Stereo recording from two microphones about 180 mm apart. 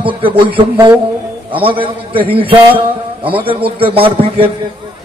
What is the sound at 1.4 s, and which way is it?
A man's voice, 30° right (ahead or behind).